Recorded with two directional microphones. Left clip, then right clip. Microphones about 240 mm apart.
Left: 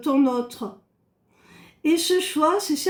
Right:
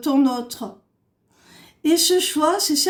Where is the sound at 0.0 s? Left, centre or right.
Right.